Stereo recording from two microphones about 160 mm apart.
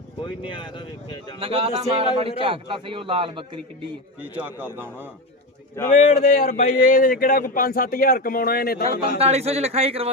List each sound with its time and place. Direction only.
0.2 s speech: 30° left (ahead or behind)
1.4 s a man's voice: 40° right (ahead or behind)
4.2 s speech: 10° right (ahead or behind)
5.9 s speech: 60° left (ahead or behind)
9.1 s a man's voice: 40° right (ahead or behind)